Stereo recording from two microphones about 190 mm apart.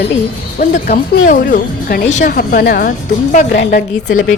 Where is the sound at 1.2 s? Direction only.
45° left (ahead or behind).